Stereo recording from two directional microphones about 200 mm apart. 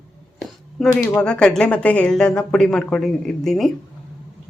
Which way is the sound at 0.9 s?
15° left (ahead or behind).